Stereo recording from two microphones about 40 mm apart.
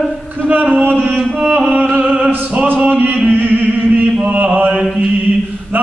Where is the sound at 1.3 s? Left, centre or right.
Right.